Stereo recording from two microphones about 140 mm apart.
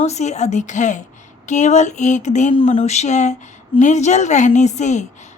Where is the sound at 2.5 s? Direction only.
45° left (ahead or behind).